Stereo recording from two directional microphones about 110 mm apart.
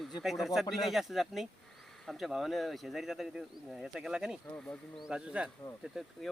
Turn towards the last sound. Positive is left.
turn(degrees=-5)  # may be behind; listen again after turning